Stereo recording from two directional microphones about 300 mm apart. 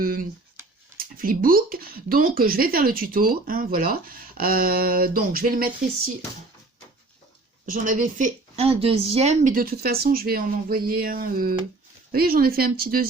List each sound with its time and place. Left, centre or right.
0.0 s speech: right
7.7 s speech: right